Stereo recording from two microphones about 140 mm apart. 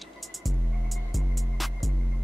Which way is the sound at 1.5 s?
Centre (ahead or behind).